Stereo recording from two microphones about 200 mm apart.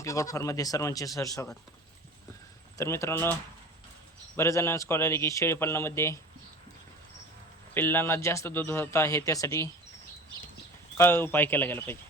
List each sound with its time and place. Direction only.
0.0 s speech: 15° left (ahead or behind)
2.7 s speech: 15° left (ahead or behind)
4.4 s speech: 15° left (ahead or behind)
7.7 s speech: 10° left (ahead or behind)
10.9 s speech: 10° left (ahead or behind)